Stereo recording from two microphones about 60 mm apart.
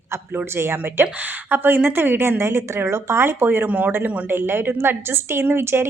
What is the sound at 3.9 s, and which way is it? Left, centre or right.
A woman's voice, right.